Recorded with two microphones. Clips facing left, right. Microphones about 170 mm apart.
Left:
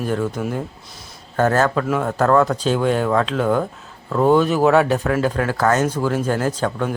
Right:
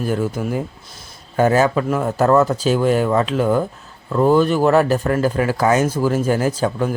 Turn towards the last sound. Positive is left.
turn(degrees=-10)  # may be behind; listen again after turning